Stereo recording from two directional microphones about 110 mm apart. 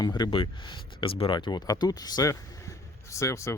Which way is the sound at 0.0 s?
40° left (ahead or behind).